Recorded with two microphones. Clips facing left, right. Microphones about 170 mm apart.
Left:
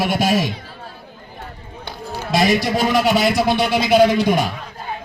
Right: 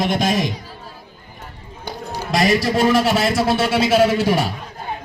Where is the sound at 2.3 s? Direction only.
Centre (ahead or behind).